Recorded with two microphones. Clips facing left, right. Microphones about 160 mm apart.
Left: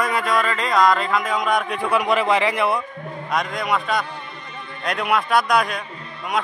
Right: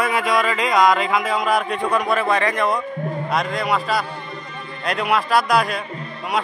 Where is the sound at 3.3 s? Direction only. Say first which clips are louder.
Even; centre (ahead or behind).